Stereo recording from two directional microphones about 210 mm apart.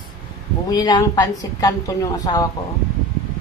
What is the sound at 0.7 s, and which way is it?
A woman's voice, 20° left (ahead or behind).